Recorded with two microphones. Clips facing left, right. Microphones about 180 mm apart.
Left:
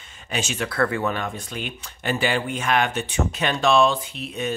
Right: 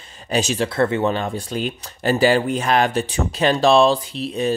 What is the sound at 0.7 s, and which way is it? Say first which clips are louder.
Speech: right 4 dB; 25° right (ahead or behind).